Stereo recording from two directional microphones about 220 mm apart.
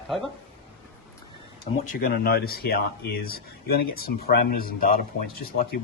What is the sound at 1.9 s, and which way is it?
Speech, 45° left (ahead or behind).